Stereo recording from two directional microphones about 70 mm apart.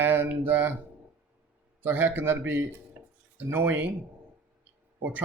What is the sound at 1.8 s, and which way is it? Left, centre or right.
Speech, right.